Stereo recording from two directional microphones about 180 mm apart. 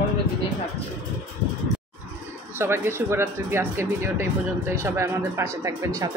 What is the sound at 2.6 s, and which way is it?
Speech, 15° right (ahead or behind).